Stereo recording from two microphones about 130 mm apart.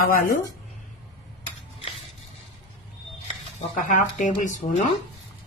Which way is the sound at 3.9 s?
80° left.